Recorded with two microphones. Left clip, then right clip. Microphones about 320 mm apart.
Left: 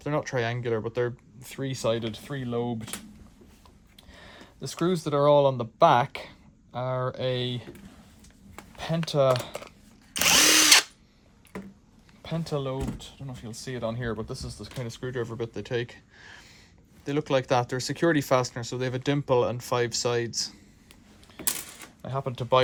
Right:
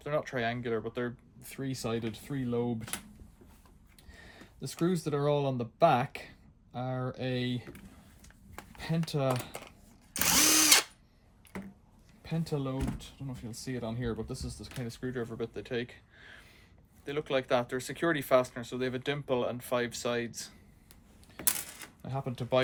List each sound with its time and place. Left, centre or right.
0.0 s speech: centre
4.1 s a sound: centre
4.6 s speech: centre
9.3 s drill: centre
10.3 s drill: centre
10.6 s drill: centre
12.2 s speech: centre
21.3 s typewriter: centre
22.0 s speech: centre